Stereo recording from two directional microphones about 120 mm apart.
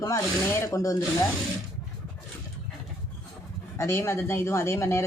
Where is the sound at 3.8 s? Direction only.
20° left (ahead or behind).